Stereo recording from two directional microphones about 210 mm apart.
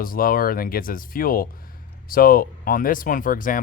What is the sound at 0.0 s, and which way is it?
Speech, 40° left (ahead or behind).